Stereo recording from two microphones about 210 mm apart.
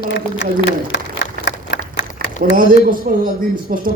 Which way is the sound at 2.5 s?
40° right (ahead or behind).